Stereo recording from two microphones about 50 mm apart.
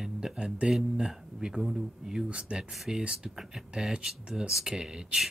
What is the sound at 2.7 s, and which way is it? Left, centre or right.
Speech, centre.